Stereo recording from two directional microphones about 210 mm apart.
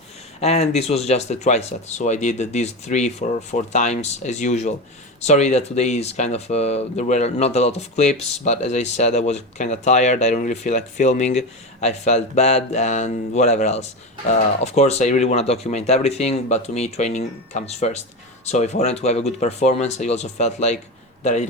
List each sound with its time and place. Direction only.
0.3 s speech: 30° left (ahead or behind)